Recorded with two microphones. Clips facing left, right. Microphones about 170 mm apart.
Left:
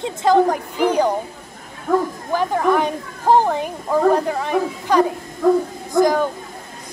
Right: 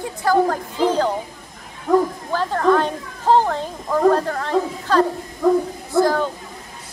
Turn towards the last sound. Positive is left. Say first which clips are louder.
# left 2 dB
turn(degrees=15)  # may be behind; listen again after turning